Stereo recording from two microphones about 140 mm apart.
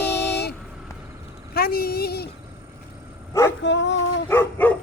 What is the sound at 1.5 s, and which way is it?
Speech, 90° left.